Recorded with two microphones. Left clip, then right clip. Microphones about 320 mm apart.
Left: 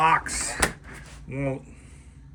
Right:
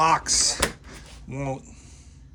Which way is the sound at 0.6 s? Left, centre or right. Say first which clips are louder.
Left 1 dB; centre.